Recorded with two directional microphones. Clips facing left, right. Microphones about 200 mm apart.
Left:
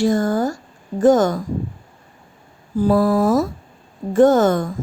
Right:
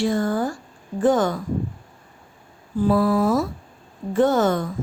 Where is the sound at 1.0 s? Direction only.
45° left (ahead or behind).